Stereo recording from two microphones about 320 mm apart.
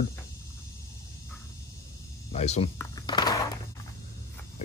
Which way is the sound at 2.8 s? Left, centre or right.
Centre.